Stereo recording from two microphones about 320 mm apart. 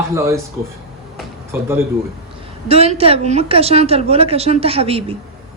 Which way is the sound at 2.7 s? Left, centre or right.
Centre.